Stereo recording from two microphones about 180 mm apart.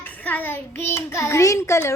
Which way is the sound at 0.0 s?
10° left (ahead or behind).